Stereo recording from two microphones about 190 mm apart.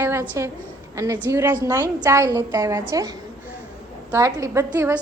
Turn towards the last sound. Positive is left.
turn(degrees=-15)  # may be behind; listen again after turning